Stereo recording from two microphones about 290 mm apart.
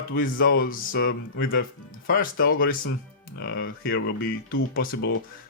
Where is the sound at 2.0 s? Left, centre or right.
Left.